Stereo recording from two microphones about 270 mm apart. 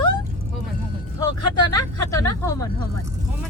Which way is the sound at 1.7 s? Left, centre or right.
Centre.